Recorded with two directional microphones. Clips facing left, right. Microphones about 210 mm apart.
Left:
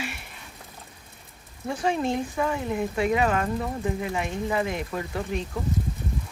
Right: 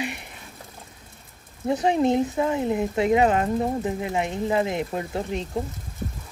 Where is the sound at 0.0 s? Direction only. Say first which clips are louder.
Right 4 dB; 20° right (ahead or behind).